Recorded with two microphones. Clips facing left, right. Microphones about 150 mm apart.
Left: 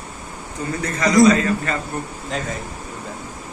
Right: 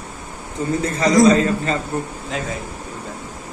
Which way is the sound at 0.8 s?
25° right (ahead or behind).